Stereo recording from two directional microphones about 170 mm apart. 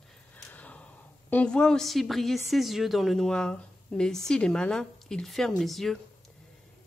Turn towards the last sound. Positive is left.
turn(degrees=0)  # may be behind; listen again after turning